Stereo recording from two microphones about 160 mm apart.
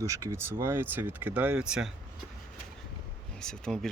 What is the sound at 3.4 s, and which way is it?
Speech, 5° left (ahead or behind).